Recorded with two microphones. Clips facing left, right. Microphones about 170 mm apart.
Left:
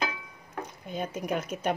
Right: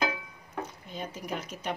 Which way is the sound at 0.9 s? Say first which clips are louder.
Left 10 dB; 55° left (ahead or behind).